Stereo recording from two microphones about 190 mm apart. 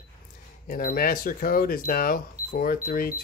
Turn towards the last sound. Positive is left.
turn(degrees=50)  # may be behind; listen again after turning